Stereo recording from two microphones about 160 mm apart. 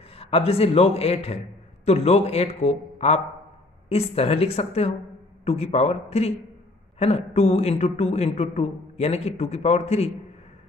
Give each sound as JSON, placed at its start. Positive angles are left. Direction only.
{"t": 0.1, "sound": "a man's voice", "side_deg": 35}